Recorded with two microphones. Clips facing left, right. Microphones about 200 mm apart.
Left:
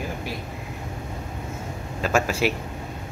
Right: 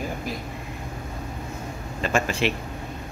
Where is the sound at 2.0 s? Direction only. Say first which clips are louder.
Left 2 dB; 5° left (ahead or behind).